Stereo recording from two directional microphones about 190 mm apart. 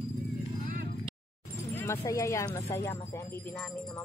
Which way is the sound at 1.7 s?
15° left (ahead or behind).